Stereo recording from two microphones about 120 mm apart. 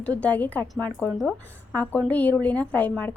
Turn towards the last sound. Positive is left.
turn(degrees=15)  # may be behind; listen again after turning